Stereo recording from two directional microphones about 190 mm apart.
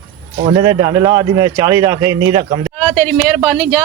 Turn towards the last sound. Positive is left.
turn(degrees=0)  # may be behind; listen again after turning